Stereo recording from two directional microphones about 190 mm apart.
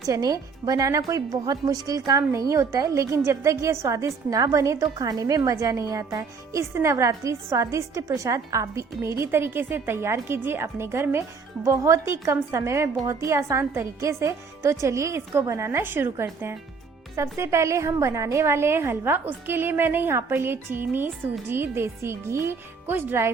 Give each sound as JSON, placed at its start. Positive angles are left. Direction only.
{"t": 0.1, "sound": "a woman's voice", "side_deg": -20}